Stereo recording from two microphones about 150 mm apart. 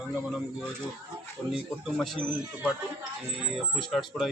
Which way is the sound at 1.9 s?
5° left (ahead or behind).